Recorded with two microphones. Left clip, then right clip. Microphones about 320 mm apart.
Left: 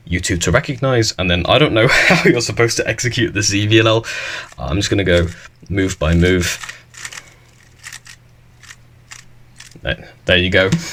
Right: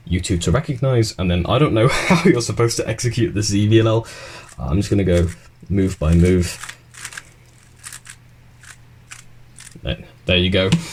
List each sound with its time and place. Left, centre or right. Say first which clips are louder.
0.1 s speech: left 5 dB; left
4.0 s speech: left 11 dB; left
4.6 s speech: left 3 dB; left
9.8 s a sound: left 5 dB; left